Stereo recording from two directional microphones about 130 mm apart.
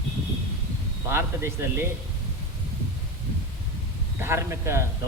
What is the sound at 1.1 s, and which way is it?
Speech, 20° right (ahead or behind).